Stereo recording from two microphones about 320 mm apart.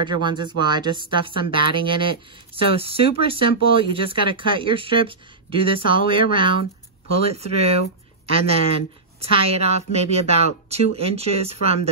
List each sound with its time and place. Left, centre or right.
0.2 s speech: centre